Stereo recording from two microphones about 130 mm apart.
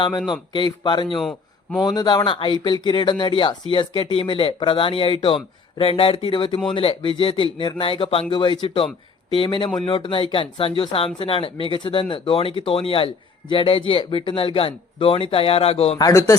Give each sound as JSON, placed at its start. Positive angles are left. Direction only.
{"t": 0.3, "sound": "speech", "side_deg": 35}
{"t": 1.2, "sound": "a sound", "side_deg": 0}
{"t": 1.8, "sound": "speech", "side_deg": 35}
{"t": 16.0, "sound": "a man's voice", "side_deg": 25}